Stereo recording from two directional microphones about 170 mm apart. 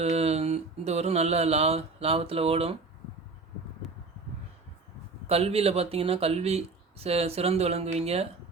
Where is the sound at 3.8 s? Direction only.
Centre (ahead or behind).